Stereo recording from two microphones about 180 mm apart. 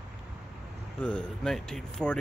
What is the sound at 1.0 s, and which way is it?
A man's voice, 5° left (ahead or behind).